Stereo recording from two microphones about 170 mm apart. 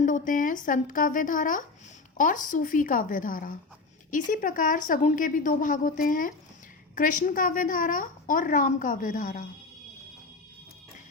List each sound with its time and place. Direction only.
0.0 s a woman's voice: 50° left (ahead or behind)